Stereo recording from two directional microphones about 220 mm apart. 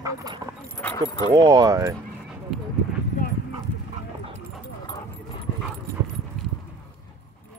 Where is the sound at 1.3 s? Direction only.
15° right (ahead or behind).